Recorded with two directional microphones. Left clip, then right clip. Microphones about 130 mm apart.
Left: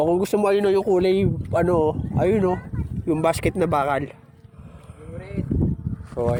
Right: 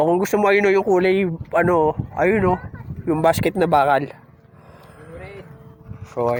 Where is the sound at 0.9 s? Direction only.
15° left (ahead or behind).